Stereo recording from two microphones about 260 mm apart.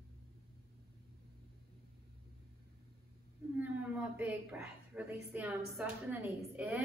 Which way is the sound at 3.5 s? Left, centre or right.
Centre.